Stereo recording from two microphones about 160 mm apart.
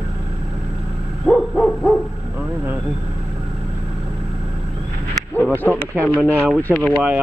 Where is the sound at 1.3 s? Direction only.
Centre (ahead or behind).